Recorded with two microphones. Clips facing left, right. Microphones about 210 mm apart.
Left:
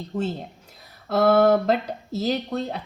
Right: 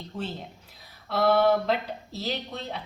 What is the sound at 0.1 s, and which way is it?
A woman's voice, 45° left (ahead or behind).